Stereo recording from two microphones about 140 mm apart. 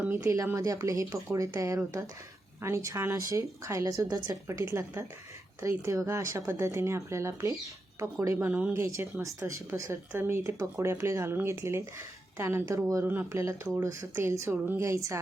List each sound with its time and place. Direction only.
0.0 s speech: 15° right (ahead or behind)